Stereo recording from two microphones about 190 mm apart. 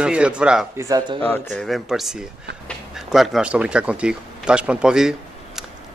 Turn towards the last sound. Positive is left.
turn(degrees=0)  # may be behind; listen again after turning